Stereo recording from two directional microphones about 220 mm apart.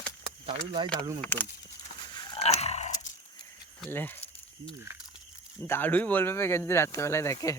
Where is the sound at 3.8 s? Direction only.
10° left (ahead or behind).